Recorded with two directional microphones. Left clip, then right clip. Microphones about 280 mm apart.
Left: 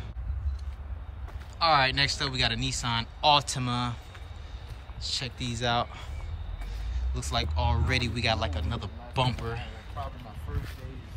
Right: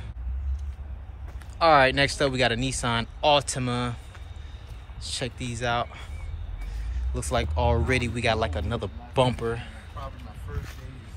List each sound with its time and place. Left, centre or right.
1.6 s speech: centre
5.0 s speech: centre
7.2 s speech: centre
9.9 s a sound: left